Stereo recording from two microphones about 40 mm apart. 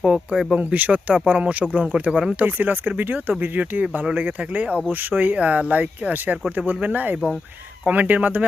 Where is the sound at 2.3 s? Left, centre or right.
Right.